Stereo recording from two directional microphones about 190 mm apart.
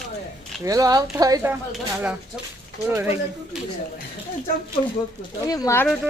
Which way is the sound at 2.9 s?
10° right (ahead or behind).